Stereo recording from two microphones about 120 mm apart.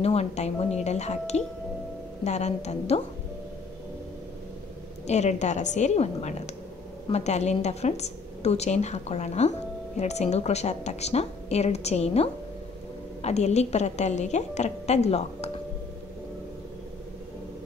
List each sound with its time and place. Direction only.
0.0 s a woman's voice: 60° left (ahead or behind)
5.0 s a woman's voice: 70° left (ahead or behind)